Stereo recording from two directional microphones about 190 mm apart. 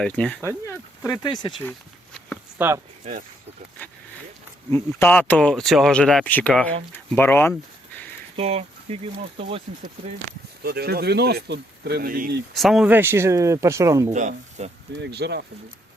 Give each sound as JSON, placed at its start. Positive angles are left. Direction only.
{"t": 0.0, "sound": "speech", "side_deg": 5}
{"t": 2.6, "sound": "speech", "side_deg": -10}
{"t": 3.0, "sound": "speech", "side_deg": -45}
{"t": 4.7, "sound": "speech", "side_deg": 10}
{"t": 8.4, "sound": "speech", "side_deg": -30}
{"t": 10.6, "sound": "speech", "side_deg": -55}
{"t": 12.5, "sound": "speech", "side_deg": 0}
{"t": 14.1, "sound": "speech", "side_deg": -40}
{"t": 14.9, "sound": "speech", "side_deg": -65}